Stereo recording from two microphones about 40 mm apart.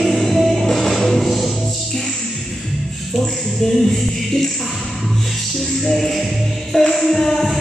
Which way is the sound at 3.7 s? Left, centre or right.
Centre.